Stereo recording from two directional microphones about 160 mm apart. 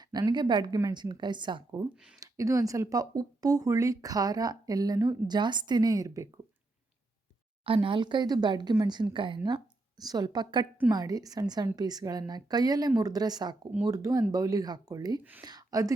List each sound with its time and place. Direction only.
0.0 s speech: 25° right (ahead or behind)
7.6 s speech: 35° right (ahead or behind)
15.2 s speech: 10° right (ahead or behind)
15.4 s speech: 25° right (ahead or behind)